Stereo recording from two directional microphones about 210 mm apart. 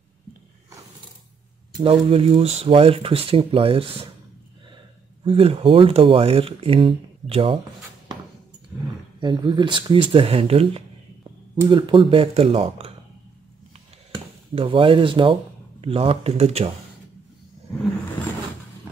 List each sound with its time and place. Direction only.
1.8 s speech: 25° right (ahead or behind)
5.2 s speech: 25° right (ahead or behind)
9.2 s speech: 20° right (ahead or behind)
14.1 s speech: 25° right (ahead or behind)